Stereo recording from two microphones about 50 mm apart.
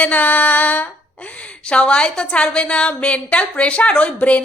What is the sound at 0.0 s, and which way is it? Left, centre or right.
A woman's voice, left.